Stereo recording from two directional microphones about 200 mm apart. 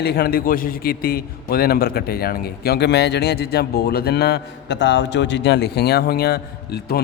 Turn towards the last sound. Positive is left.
turn(degrees=50)  # may be behind; listen again after turning